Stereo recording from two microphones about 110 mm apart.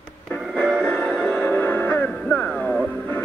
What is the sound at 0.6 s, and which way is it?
Music, 10° left (ahead or behind).